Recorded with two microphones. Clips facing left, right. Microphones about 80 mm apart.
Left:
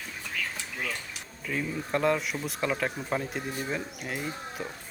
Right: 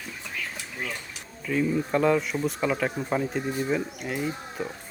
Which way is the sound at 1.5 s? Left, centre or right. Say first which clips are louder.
Right 6 dB; centre.